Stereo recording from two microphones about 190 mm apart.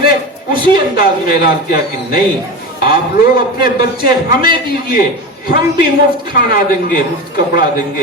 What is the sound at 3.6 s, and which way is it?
Speech, 55° left (ahead or behind).